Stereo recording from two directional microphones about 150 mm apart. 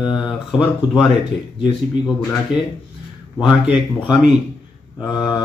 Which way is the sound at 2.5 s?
5° right (ahead or behind).